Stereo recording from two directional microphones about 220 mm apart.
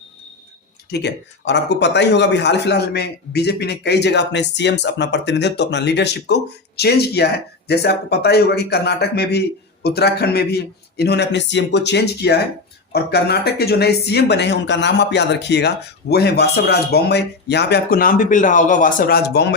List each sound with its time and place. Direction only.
0.9 s speech: 50° left (ahead or behind)